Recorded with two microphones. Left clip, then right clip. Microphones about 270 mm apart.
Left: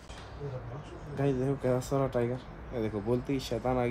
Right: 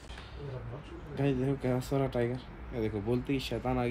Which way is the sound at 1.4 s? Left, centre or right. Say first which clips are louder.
Left 3 dB; centre.